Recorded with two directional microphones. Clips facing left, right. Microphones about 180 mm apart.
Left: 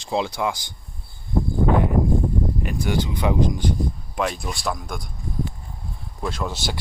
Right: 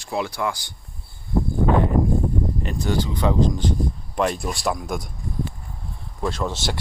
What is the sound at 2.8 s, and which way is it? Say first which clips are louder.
Speech: right 1 dB; 15° left (ahead or behind).